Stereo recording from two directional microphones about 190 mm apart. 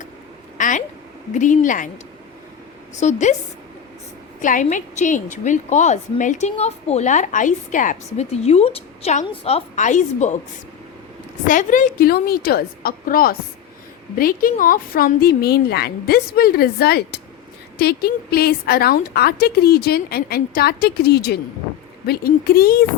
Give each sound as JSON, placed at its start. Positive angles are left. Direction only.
{"t": 0.6, "sound": "a sound", "side_deg": 45}
{"t": 1.3, "sound": "a woman's voice", "side_deg": 40}
{"t": 2.9, "sound": "a woman's voice", "side_deg": 40}
{"t": 4.4, "sound": "a woman's voice", "side_deg": 45}
{"t": 11.4, "sound": "a woman's voice", "side_deg": 45}